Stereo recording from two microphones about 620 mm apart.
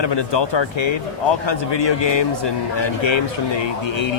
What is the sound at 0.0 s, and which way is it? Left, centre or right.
Speech, left.